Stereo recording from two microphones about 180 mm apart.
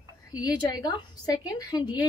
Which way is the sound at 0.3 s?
20° left (ahead or behind).